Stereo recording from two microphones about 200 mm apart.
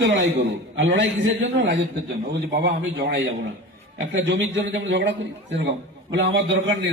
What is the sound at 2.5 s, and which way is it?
Speech, 65° right (ahead or behind).